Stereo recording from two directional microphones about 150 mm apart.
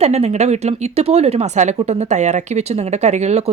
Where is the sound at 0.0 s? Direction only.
45° right (ahead or behind).